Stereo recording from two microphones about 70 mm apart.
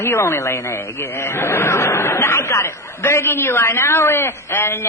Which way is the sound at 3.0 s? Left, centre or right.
Left.